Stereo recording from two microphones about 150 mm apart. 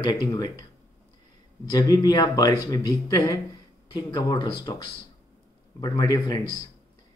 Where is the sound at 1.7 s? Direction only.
25° left (ahead or behind).